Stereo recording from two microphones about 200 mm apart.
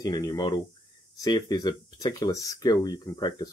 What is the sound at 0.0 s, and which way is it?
Speech, 20° left (ahead or behind).